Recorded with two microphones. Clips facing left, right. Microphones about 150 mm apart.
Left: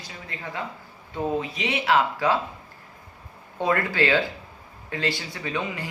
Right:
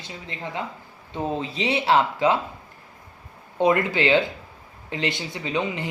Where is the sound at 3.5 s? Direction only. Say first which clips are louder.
Right 3 dB; 20° right (ahead or behind).